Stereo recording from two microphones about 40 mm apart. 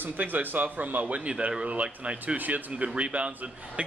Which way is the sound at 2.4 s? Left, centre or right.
Right.